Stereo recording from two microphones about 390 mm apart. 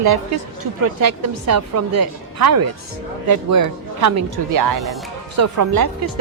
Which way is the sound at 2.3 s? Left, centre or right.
Right.